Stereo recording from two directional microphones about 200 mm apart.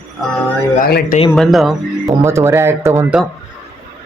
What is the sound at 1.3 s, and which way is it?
Speech, centre (ahead or behind).